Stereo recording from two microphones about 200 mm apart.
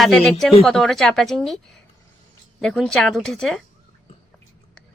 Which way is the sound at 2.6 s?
5° left (ahead or behind).